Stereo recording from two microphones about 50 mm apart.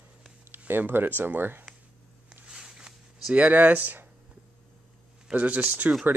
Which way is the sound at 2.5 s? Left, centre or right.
Centre.